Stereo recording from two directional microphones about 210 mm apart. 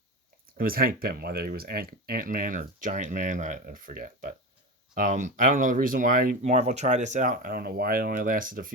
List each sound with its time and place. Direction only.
0.5 s speech: 45° right (ahead or behind)